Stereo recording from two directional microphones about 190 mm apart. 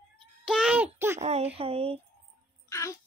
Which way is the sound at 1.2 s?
35° right (ahead or behind).